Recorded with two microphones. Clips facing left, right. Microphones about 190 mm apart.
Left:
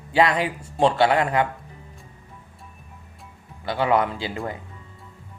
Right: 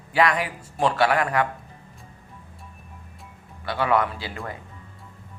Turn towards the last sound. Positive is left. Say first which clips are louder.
# left 4 dB
turn(degrees=20)  # may be behind; listen again after turning